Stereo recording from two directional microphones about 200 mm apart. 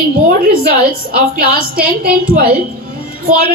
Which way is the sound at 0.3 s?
50° right (ahead or behind).